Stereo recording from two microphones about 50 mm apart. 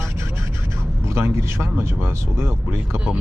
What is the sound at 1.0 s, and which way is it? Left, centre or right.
Speech, right.